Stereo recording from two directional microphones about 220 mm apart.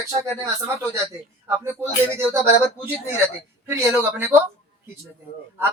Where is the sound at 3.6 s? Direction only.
10° right (ahead or behind).